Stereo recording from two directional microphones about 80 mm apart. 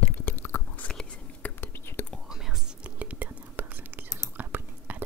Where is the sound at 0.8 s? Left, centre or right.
Centre.